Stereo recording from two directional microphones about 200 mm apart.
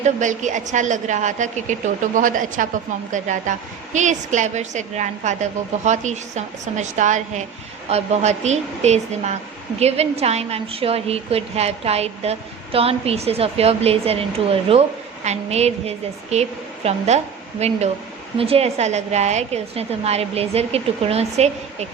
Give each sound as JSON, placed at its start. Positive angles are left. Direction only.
{"t": 0.0, "sound": "speech", "side_deg": -40}